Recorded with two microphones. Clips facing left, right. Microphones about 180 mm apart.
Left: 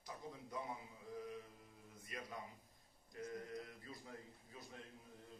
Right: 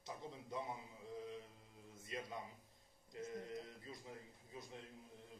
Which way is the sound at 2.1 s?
25° right (ahead or behind).